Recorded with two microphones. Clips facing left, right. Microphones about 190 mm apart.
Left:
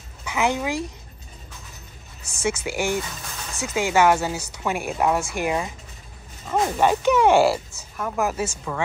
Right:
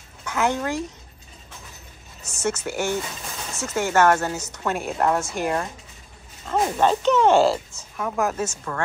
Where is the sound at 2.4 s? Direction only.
10° left (ahead or behind).